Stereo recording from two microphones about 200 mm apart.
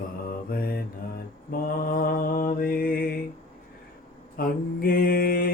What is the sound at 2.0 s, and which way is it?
Mantra, 45° left (ahead or behind).